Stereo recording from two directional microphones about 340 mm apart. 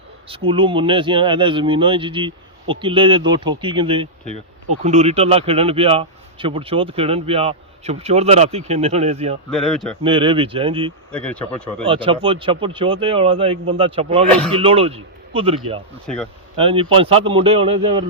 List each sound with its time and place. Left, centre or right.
0.3 s speech: centre
9.5 s speech: centre
10.0 s speech: centre
11.1 s speech: centre
11.8 s speech: centre
16.0 s speech: centre
16.6 s speech: centre